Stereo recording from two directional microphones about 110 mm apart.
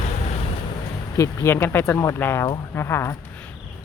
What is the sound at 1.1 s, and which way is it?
A woman's voice, 25° left (ahead or behind).